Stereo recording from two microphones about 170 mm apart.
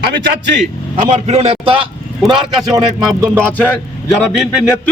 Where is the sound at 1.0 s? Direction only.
45° right (ahead or behind).